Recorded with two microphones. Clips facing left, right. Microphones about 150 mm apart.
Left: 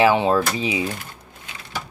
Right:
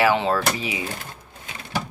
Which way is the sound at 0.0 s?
20° left (ahead or behind).